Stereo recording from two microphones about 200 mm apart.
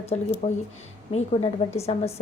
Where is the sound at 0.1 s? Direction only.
35° left (ahead or behind).